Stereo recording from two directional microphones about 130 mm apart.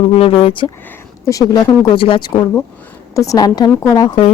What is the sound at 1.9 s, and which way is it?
Speech, 40° left (ahead or behind).